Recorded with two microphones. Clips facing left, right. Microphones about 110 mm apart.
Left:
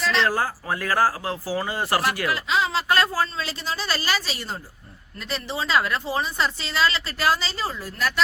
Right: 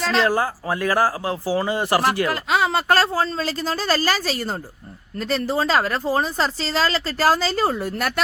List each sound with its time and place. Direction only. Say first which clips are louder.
0.3 s speech: right 3 dB; 25° right (ahead or behind)
2.3 s speech: right 3 dB; 55° right (ahead or behind)
2.9 s speech: right 2 dB; 30° right (ahead or behind)
3.3 s speech: right 5 dB; 40° right (ahead or behind); by 8.2 s 55° right (ahead or behind)